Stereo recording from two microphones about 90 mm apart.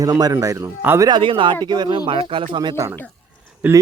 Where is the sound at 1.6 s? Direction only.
55° right (ahead or behind).